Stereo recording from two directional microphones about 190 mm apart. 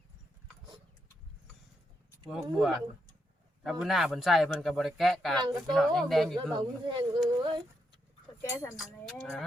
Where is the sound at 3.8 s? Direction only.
Centre (ahead or behind).